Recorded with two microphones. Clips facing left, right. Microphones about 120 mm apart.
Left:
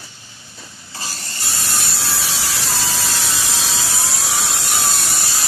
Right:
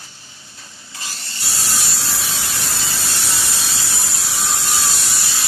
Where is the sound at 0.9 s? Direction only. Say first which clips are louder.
Left 3 dB; 35° left (ahead or behind).